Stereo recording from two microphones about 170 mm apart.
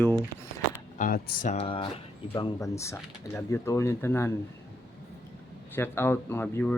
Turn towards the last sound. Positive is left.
turn(degrees=15)  # may be behind; listen again after turning